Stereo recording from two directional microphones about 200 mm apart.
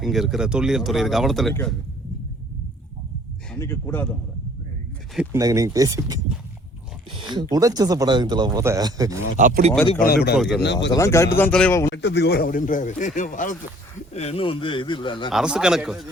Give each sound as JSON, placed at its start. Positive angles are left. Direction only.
{"t": 0.0, "sound": "speech", "side_deg": 0}
{"t": 3.6, "sound": "speech", "side_deg": 15}
{"t": 5.1, "sound": "speech", "side_deg": -10}
{"t": 9.4, "sound": "speech", "side_deg": -40}
{"t": 10.0, "sound": "speech", "side_deg": 50}
{"t": 10.3, "sound": "speech", "side_deg": 0}
{"t": 10.6, "sound": "speech", "side_deg": 60}
{"t": 10.9, "sound": "speech", "side_deg": 15}
{"t": 11.9, "sound": "a man's voice", "side_deg": 60}
{"t": 15.3, "sound": "speech", "side_deg": -5}